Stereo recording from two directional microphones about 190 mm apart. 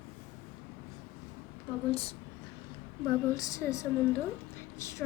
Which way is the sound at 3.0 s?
20° left (ahead or behind).